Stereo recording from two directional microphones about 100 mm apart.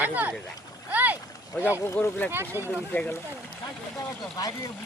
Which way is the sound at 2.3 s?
20° right (ahead or behind).